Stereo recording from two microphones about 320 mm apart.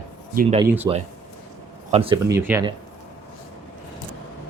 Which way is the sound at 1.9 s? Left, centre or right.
Centre.